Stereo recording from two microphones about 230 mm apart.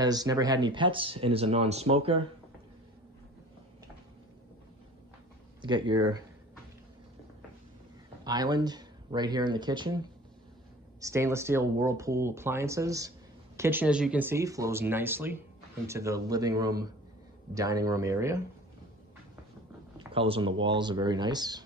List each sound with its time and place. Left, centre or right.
0.0 s speech: centre
5.6 s speech: right
8.2 s speech: centre
20.0 s speech: right